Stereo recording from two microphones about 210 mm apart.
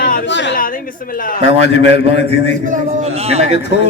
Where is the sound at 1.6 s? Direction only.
30° right (ahead or behind).